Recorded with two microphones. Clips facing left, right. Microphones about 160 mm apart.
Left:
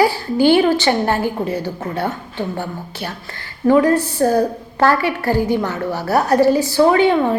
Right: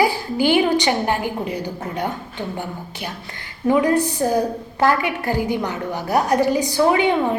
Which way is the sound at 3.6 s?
15° right (ahead or behind).